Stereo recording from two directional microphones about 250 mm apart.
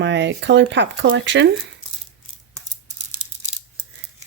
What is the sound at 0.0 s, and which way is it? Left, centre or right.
Speech, right.